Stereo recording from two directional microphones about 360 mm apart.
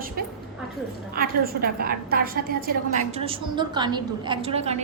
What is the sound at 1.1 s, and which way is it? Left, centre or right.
A woman's voice, right.